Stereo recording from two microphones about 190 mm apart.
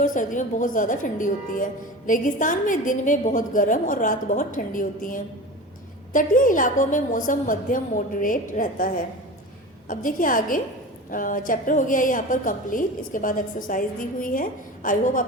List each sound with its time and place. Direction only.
0.0 s a woman's voice: 45° left (ahead or behind)